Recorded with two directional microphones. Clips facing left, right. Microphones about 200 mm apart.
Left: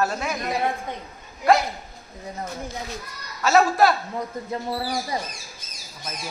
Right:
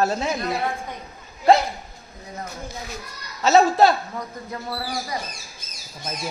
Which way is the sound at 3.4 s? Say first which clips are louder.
Right 2 dB; 25° right (ahead or behind).